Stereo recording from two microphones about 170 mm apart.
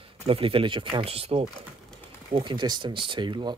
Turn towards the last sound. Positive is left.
turn(degrees=-25)  # may be behind; listen again after turning